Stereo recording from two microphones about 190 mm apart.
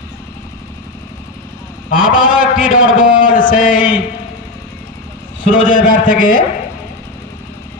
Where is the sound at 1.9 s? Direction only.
45° left (ahead or behind).